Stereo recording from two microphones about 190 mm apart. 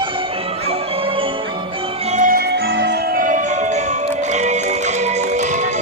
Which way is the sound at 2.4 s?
60° right (ahead or behind).